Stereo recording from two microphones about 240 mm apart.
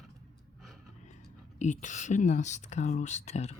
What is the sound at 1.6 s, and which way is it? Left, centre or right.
Speech, left.